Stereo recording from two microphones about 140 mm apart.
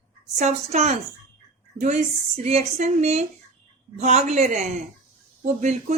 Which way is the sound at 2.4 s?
50° right (ahead or behind).